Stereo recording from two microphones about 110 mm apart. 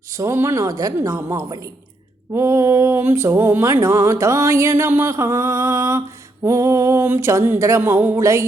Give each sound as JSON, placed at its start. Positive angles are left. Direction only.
{"t": 0.1, "sound": "mantra", "side_deg": -30}